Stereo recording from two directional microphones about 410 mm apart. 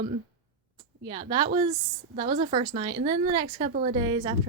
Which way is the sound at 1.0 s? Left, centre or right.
Centre.